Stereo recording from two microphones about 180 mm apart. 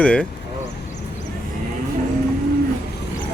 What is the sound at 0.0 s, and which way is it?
Speech, 5° left (ahead or behind).